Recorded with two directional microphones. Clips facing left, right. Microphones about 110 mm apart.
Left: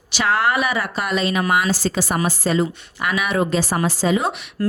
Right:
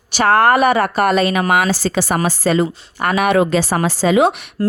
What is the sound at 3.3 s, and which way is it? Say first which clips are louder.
Speech: right 5 dB; 85° right.